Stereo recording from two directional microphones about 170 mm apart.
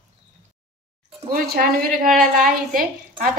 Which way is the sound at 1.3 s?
60° right (ahead or behind).